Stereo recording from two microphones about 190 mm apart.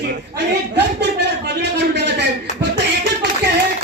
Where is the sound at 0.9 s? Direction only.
60° right (ahead or behind).